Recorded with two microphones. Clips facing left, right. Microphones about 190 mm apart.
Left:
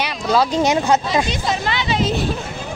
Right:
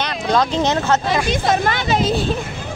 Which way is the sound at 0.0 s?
5° left (ahead or behind).